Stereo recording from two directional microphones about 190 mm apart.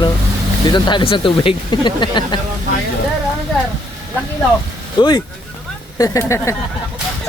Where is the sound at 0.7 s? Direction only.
25° left (ahead or behind).